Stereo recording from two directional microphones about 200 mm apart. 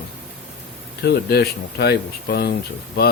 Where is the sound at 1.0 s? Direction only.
50° left (ahead or behind).